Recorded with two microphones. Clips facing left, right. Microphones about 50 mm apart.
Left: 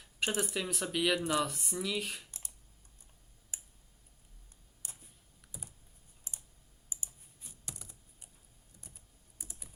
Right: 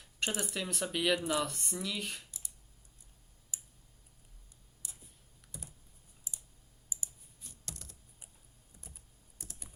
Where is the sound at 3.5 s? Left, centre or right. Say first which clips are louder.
Right 1 dB; left.